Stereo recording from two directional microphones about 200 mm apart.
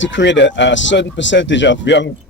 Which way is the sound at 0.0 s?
65° left (ahead or behind).